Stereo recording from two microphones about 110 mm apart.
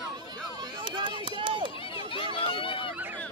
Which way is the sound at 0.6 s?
45° right (ahead or behind).